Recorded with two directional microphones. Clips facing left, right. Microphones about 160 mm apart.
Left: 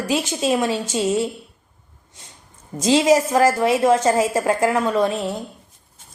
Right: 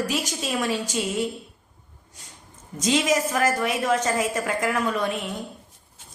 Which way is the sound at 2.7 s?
30° left (ahead or behind).